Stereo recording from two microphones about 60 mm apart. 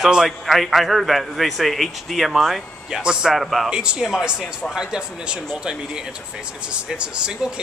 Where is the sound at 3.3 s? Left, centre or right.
Centre.